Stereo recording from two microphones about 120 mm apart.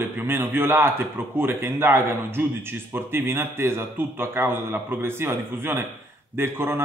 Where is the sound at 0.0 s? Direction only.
20° right (ahead or behind).